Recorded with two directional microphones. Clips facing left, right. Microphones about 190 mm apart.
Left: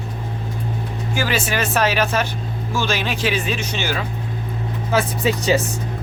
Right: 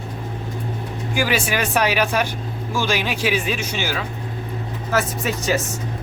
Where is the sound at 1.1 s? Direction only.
10° right (ahead or behind).